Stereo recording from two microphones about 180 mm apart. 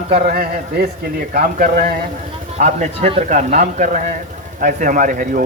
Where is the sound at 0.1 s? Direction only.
40° right (ahead or behind).